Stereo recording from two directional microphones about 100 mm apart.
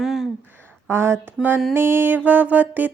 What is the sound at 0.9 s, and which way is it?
A woman's voice, 25° right (ahead or behind).